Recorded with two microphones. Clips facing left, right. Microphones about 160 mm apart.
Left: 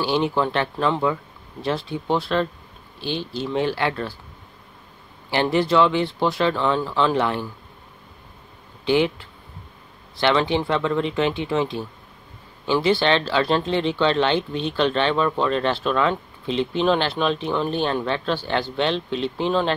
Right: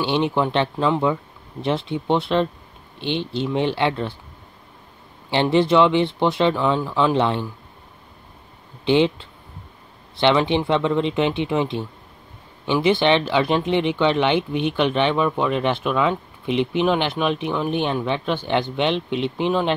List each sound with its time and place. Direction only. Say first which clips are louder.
0.0 s speech: right 1 dB; 20° right (ahead or behind)
5.3 s speech: right 2 dB; 25° right (ahead or behind)
8.8 s speech: right 2 dB; 25° right (ahead or behind)